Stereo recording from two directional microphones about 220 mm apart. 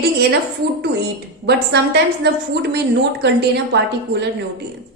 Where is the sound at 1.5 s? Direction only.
50° right (ahead or behind).